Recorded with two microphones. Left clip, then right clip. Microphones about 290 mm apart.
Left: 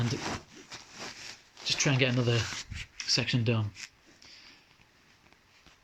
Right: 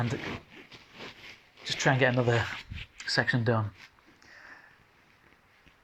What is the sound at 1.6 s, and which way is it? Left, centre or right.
Speech, centre.